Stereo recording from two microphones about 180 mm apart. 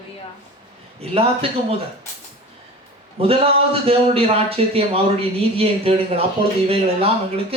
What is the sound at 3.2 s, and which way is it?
Speech, 30° right (ahead or behind).